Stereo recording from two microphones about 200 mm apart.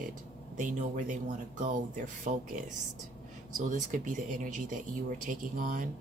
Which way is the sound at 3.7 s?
40° right (ahead or behind).